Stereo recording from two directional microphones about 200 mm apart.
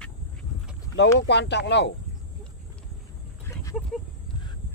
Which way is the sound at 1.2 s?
60° left (ahead or behind).